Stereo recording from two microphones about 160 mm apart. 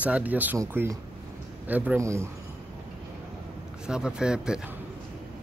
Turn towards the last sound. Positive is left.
turn(degrees=-5)  # may be behind; listen again after turning